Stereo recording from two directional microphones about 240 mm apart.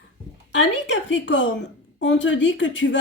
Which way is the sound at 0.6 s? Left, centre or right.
Left.